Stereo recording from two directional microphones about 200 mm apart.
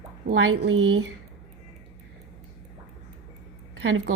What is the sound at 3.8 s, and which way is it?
Speech, 75° right (ahead or behind).